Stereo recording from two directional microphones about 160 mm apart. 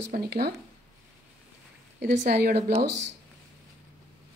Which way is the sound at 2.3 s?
75° right (ahead or behind).